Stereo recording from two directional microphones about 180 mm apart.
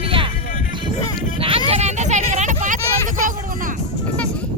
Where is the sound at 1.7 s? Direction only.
40° right (ahead or behind).